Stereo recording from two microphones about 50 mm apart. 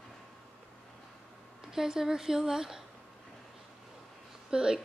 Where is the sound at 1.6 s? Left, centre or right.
Centre.